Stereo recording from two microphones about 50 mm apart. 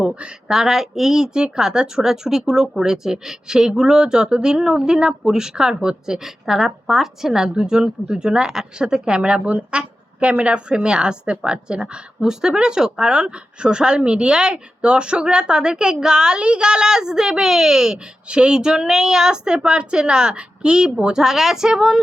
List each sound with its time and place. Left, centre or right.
0.0 s a woman's voice: centre